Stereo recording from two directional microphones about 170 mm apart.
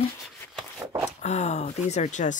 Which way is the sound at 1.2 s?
40° left (ahead or behind).